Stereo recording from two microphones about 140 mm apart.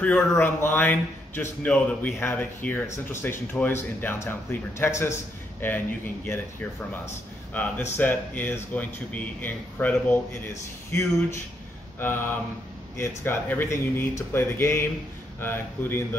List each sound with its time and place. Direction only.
0.0 s a man's voice: 10° left (ahead or behind)
8.0 s a man's voice: 15° left (ahead or behind)